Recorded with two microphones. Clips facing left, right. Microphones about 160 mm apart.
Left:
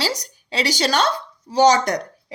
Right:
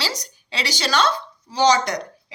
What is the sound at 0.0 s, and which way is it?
A woman's voice, 45° left (ahead or behind).